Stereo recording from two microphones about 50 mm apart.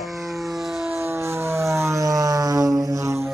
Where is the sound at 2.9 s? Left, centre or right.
Right.